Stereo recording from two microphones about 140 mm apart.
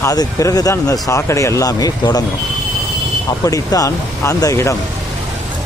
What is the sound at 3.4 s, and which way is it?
Speech, 25° left (ahead or behind).